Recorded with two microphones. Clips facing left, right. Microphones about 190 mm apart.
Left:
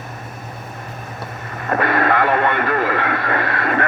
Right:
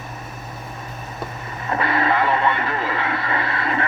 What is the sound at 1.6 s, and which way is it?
Radio, 55° left (ahead or behind).